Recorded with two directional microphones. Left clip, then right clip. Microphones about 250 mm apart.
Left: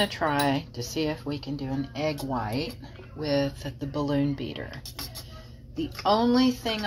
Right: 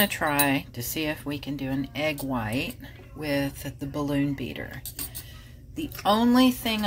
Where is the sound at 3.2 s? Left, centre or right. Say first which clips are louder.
Left 1 dB; right.